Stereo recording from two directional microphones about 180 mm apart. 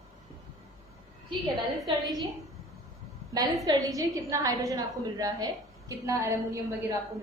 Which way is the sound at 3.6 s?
20° right (ahead or behind).